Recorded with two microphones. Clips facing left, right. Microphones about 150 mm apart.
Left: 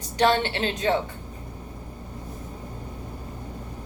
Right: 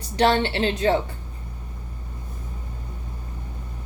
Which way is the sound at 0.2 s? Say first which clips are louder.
Right 2 dB; 30° right (ahead or behind).